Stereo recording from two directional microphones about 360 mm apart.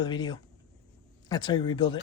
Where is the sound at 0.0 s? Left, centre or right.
Centre.